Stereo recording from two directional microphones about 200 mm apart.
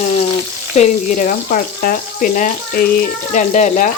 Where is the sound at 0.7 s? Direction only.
35° left (ahead or behind).